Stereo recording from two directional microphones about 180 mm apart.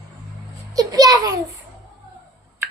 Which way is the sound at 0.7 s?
20° right (ahead or behind).